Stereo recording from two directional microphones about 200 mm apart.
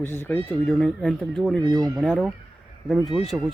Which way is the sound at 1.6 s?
20° right (ahead or behind).